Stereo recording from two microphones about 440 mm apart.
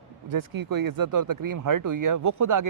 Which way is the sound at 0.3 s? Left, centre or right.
Right.